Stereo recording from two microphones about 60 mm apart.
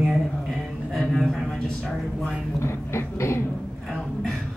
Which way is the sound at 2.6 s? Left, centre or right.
Left.